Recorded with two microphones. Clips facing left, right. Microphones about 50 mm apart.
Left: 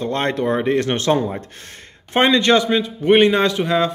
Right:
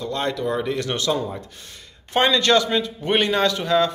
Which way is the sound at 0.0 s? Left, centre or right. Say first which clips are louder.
Left 4 dB; left.